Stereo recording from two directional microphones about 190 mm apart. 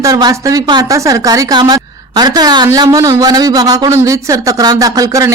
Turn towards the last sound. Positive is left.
turn(degrees=-15)  # may be behind; listen again after turning